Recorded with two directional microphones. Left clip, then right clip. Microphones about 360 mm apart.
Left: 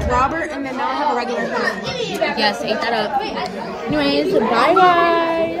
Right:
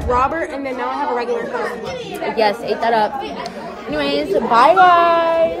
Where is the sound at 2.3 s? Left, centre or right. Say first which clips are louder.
Right 2 dB; centre.